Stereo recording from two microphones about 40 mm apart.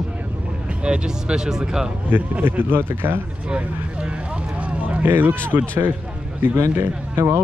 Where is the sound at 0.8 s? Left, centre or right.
Right.